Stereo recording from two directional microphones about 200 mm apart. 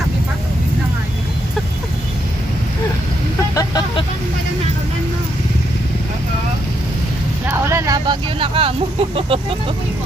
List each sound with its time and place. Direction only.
3.5 s vehicle: 20° left (ahead or behind)
7.4 s speech: 15° right (ahead or behind)